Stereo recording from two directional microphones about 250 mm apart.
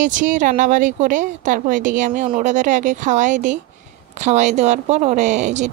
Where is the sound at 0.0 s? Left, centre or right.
Right.